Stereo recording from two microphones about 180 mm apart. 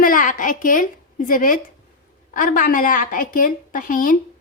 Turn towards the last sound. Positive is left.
turn(degrees=50)  # may be behind; listen again after turning